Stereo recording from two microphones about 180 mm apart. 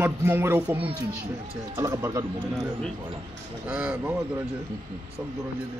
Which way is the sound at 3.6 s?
10° right (ahead or behind).